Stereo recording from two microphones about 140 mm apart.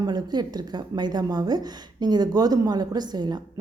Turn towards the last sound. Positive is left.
turn(degrees=-30)  # may be behind; listen again after turning